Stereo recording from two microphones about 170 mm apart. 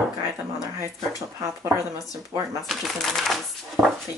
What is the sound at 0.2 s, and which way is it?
Speech, 15° right (ahead or behind).